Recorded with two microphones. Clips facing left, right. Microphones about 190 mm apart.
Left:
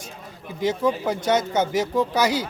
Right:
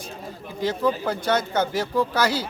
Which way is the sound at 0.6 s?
20° left (ahead or behind).